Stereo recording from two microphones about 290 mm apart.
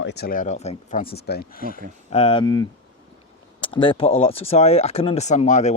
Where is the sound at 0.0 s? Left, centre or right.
Left.